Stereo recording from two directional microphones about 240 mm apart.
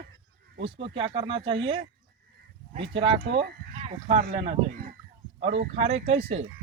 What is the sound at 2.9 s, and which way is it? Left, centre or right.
Speech, right.